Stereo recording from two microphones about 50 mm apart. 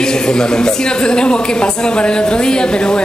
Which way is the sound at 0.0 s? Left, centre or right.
Centre.